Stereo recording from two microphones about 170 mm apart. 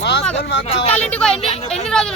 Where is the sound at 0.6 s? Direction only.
35° left (ahead or behind).